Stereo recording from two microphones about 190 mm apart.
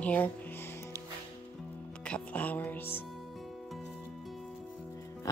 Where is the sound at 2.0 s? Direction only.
5° left (ahead or behind).